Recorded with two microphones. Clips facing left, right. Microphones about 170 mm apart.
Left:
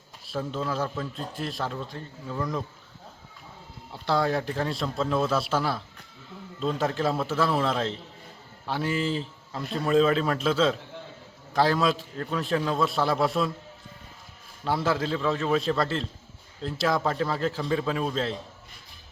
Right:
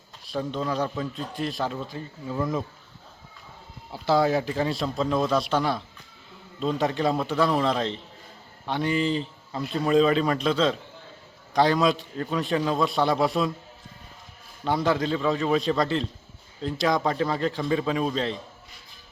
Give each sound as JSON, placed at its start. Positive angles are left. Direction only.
{"t": 0.3, "sound": "speech", "side_deg": 5}
{"t": 3.9, "sound": "speech", "side_deg": 0}
{"t": 14.6, "sound": "speech", "side_deg": 5}